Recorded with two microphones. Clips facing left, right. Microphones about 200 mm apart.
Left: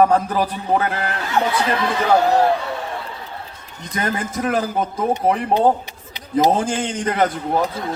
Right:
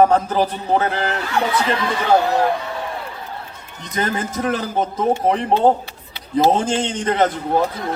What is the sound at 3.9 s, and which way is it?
Speech, 30° right (ahead or behind).